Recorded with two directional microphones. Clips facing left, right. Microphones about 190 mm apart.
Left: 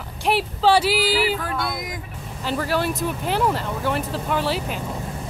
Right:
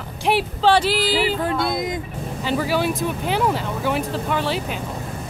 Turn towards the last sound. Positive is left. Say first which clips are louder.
# even
turn(degrees=0)  # may be behind; listen again after turning